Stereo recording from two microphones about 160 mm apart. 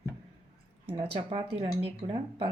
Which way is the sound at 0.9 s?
35° right (ahead or behind).